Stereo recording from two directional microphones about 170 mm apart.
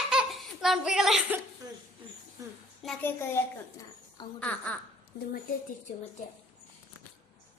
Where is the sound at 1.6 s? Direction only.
25° right (ahead or behind).